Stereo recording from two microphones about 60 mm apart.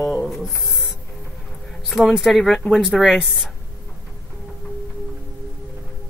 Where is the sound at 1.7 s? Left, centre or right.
Centre.